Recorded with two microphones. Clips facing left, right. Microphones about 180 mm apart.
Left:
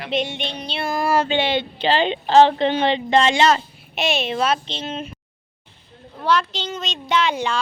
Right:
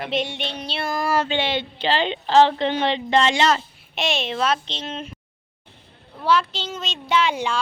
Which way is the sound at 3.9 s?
5° left (ahead or behind).